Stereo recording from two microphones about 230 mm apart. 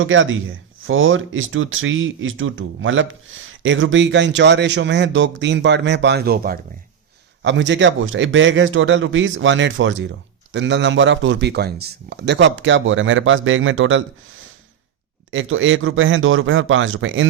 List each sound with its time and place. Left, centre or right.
0.0 s speech: right
7.4 s speech: right